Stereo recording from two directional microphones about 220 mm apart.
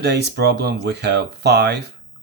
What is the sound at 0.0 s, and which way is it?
Speech, 50° right (ahead or behind).